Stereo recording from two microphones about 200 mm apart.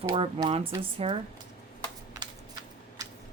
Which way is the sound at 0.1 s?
25° right (ahead or behind).